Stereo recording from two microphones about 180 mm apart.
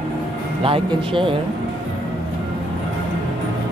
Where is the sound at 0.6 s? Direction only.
30° right (ahead or behind).